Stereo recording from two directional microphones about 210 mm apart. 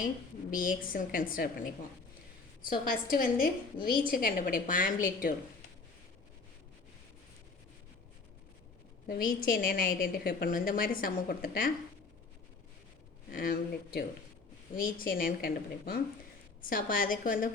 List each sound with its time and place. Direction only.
0.5 s a woman's voice: 40° left (ahead or behind)
9.0 s a woman's voice: 45° left (ahead or behind)
13.3 s a woman's voice: 45° left (ahead or behind)